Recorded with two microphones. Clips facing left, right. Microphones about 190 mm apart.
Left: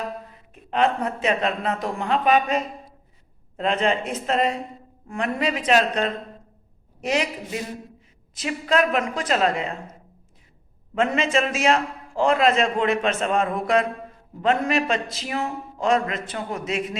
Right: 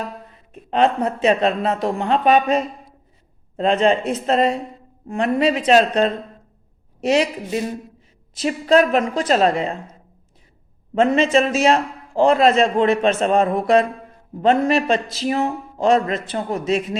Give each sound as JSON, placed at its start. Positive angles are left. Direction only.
{"t": 0.7, "sound": "a man's voice", "side_deg": -30}
{"t": 3.6, "sound": "a man's voice", "side_deg": -30}
{"t": 10.9, "sound": "a man's voice", "side_deg": -30}